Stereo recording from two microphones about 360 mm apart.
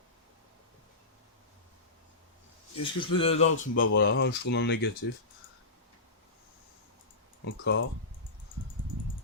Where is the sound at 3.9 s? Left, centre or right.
Left.